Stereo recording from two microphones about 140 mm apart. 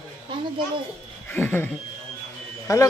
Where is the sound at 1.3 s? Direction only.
15° left (ahead or behind).